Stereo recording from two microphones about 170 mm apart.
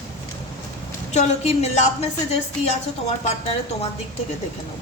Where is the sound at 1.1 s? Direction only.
40° left (ahead or behind).